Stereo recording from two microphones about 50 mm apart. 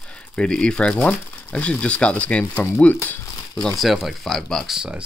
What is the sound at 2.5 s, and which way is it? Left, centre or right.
Speech, left.